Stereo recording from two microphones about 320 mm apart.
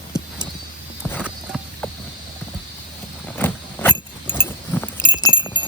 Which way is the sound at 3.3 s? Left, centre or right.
Centre.